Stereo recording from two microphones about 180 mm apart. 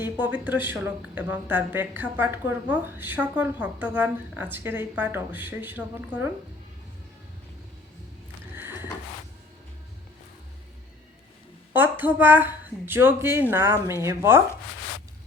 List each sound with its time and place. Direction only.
0.0 s speech: 10° right (ahead or behind)
8.5 s a sound: 10° right (ahead or behind)
11.7 s speech: 10° right (ahead or behind)